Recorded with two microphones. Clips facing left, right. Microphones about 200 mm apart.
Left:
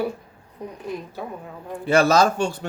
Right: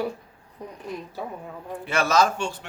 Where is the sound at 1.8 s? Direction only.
35° left (ahead or behind).